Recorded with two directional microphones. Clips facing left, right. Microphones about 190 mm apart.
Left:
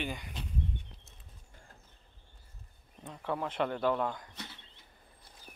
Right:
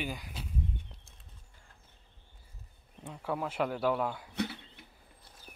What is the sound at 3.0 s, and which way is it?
Speech, 5° right (ahead or behind).